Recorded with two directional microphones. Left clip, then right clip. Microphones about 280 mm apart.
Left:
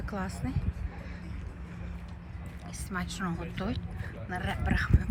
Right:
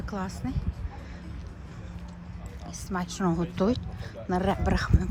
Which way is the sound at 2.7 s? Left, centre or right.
Centre.